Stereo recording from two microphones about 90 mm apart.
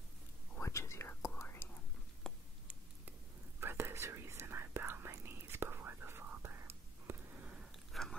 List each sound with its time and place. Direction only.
0.6 s whispering: 30° left (ahead or behind)
2.3 s a sound: 5° left (ahead or behind)
3.6 s whispering: 25° right (ahead or behind)
7.9 s biting: 5° left (ahead or behind)